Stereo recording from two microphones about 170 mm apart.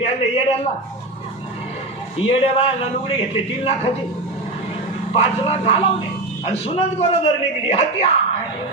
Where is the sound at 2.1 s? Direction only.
30° left (ahead or behind).